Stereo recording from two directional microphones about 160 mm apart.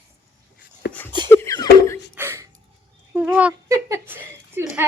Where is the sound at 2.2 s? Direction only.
15° right (ahead or behind).